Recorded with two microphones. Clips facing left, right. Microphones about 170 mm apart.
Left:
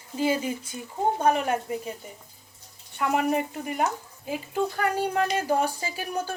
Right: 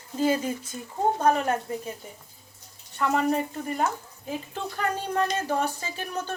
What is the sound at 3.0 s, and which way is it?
Speech, 15° left (ahead or behind).